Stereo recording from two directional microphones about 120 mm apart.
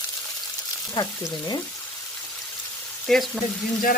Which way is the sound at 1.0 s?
35° left (ahead or behind).